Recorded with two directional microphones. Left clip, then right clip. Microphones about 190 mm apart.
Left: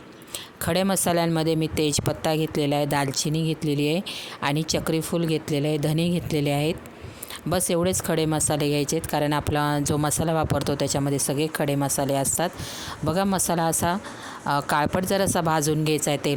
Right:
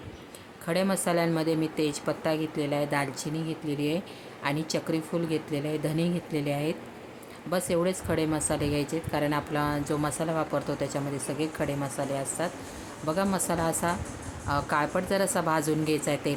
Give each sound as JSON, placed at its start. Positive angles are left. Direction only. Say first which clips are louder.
{"t": 0.6, "sound": "speech", "louder": "left 4 dB", "side_deg": 55}